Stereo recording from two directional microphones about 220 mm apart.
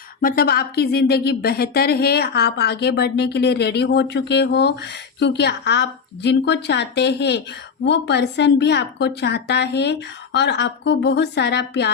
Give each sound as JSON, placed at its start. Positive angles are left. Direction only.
{"t": 0.2, "sound": "speech", "side_deg": 40}